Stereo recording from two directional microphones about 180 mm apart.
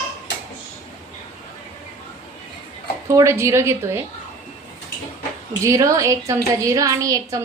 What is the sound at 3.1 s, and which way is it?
Speech, 15° right (ahead or behind).